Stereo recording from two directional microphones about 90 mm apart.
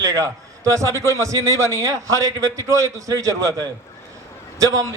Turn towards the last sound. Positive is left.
turn(degrees=-40)  # may be behind; listen again after turning